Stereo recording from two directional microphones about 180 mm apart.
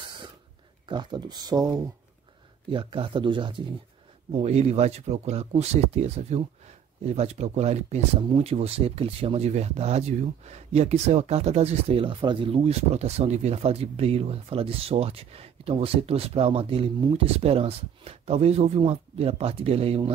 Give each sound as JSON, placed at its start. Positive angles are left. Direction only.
{"t": 0.8, "sound": "speech", "side_deg": -25}
{"t": 2.7, "sound": "speech", "side_deg": -30}